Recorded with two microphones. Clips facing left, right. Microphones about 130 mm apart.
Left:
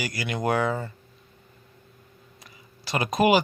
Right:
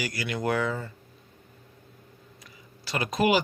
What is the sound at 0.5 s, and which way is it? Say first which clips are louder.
Speech: left 4 dB; 45° left (ahead or behind).